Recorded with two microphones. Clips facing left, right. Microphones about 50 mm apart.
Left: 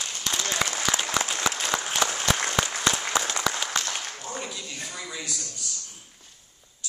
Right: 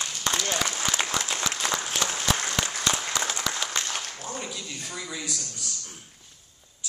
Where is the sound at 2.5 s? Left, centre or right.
Centre.